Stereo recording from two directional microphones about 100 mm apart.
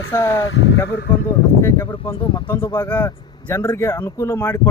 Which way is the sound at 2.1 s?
60° left (ahead or behind).